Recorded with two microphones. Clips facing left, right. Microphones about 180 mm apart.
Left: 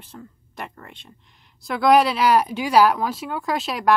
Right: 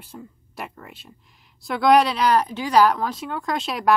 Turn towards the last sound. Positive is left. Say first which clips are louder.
# left 1 dB
turn(degrees=0)  # may be behind; listen again after turning